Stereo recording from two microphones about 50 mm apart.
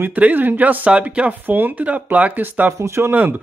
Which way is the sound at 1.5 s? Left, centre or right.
Right.